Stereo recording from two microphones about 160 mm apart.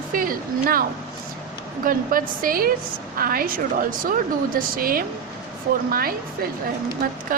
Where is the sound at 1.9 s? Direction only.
60° right (ahead or behind).